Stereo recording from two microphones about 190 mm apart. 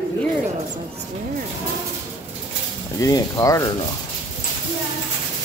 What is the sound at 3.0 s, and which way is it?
Speech, 20° left (ahead or behind).